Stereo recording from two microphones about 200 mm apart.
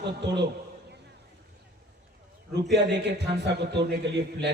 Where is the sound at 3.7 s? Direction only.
60° right (ahead or behind).